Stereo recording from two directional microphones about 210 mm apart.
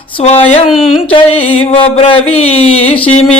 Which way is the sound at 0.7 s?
Centre (ahead or behind).